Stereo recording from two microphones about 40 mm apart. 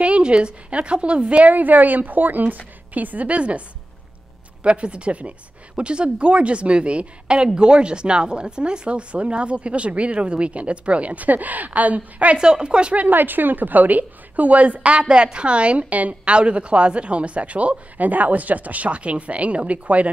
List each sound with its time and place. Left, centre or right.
0.0 s a woman's voice: right
4.6 s speech: right
12.4 s speech: right
13.1 s a woman's voice: right